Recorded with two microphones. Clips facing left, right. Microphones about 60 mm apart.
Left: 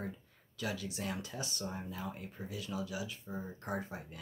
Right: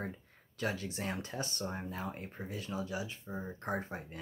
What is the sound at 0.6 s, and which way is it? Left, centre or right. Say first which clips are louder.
Speech: right 2 dB; right.